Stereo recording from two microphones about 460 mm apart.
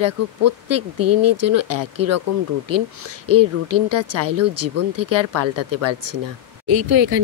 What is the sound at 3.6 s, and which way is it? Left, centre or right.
Speech, right.